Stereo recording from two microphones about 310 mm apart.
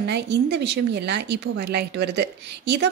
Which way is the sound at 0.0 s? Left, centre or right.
Right.